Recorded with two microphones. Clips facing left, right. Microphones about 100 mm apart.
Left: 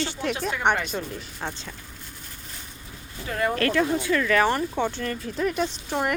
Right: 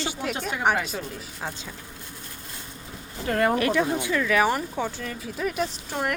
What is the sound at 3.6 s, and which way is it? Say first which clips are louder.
Speech: even; 15° right (ahead or behind).